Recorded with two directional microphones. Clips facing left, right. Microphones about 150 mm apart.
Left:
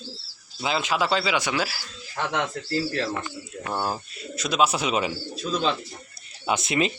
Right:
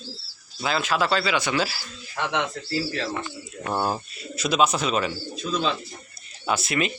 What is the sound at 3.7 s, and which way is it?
A man's voice, 15° right (ahead or behind).